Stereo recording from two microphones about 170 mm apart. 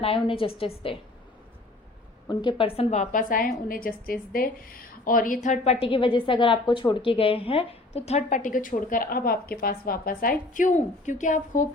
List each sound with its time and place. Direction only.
0.0 s a woman's voice: 30° left (ahead or behind)
2.4 s a woman's voice: 30° left (ahead or behind); by 11.7 s 50° left (ahead or behind)